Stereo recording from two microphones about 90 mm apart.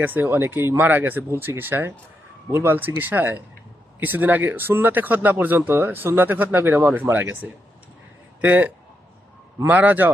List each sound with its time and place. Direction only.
0.0 s a man's voice: 20° right (ahead or behind)